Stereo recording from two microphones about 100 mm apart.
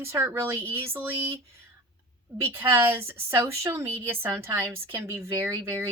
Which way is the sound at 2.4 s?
25° right (ahead or behind).